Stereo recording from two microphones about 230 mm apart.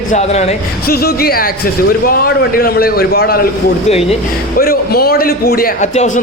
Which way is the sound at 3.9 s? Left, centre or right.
Left.